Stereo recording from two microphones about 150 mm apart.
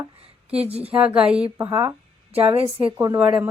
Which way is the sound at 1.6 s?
20° right (ahead or behind).